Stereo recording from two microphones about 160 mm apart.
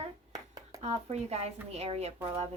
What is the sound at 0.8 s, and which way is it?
A woman's voice, 45° right (ahead or behind).